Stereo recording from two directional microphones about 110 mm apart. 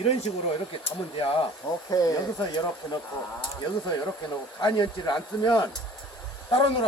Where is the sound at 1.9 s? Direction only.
35° left (ahead or behind).